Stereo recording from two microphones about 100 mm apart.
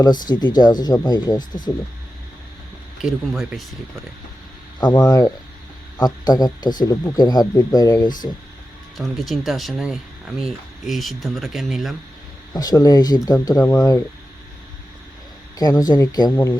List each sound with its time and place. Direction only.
0.0 s speech: 45° left (ahead or behind)
3.0 s speech: centre (ahead or behind)
5.0 s speech: 40° left (ahead or behind)
9.0 s speech: centre (ahead or behind)
12.5 s speech: 40° left (ahead or behind)
15.5 s speech: 40° left (ahead or behind)